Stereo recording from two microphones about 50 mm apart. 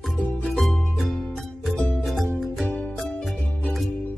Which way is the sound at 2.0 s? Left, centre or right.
Centre.